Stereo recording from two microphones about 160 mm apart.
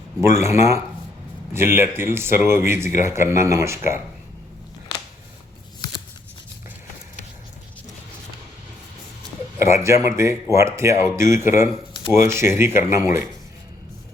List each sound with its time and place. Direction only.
0.2 s speech: 15° right (ahead or behind)
9.6 s speech: 15° right (ahead or behind)